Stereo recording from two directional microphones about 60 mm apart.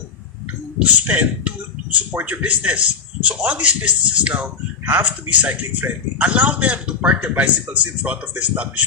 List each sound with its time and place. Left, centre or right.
0.8 s a man's voice: right